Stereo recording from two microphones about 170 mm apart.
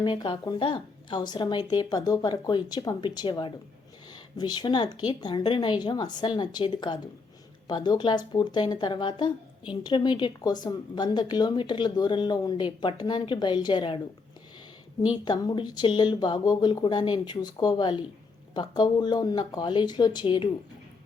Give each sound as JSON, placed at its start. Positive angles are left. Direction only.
{"t": 0.0, "sound": "speech", "side_deg": 30}
{"t": 15.0, "sound": "speech", "side_deg": 25}